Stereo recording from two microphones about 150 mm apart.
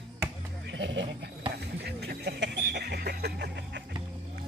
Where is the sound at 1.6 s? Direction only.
90° right.